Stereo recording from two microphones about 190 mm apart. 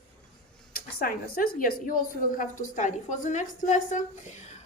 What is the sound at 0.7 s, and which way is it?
A woman's voice, 50° left (ahead or behind).